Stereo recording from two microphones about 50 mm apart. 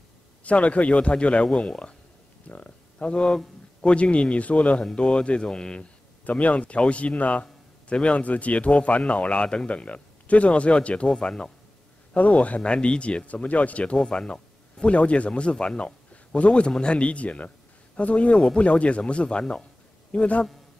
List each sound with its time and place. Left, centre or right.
0.4 s speech: left
2.4 s speech: left
6.2 s speech: left
12.1 s speech: left
13.9 s a man's voice: centre